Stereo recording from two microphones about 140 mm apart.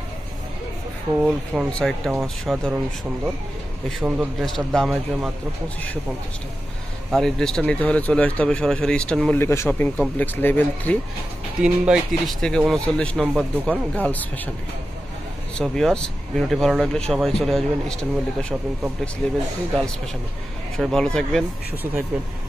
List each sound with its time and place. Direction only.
1.1 s speech: 5° right (ahead or behind)
4.0 s a man's voice: 10° right (ahead or behind)
4.6 s speech: centre (ahead or behind)
7.1 s speech: centre (ahead or behind)
9.4 s speech: 20° left (ahead or behind)
11.6 s speech: 5° right (ahead or behind); by 14.5 s 10° left (ahead or behind)
15.5 s speech: 5° left (ahead or behind)
20.7 s speech: 5° left (ahead or behind)